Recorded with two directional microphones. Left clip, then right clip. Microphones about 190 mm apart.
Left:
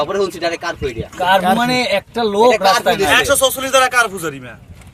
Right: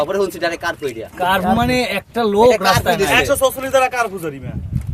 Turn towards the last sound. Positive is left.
turn(degrees=-10)  # may be behind; listen again after turning